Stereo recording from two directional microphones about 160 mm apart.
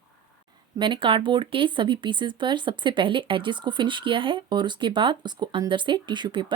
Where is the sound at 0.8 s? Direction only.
30° right (ahead or behind).